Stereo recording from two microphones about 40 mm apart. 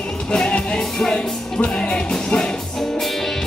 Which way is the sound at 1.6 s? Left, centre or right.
Left.